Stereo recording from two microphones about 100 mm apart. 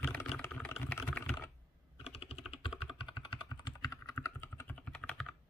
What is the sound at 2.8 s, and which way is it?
Computer keyboard, 55° left (ahead or behind).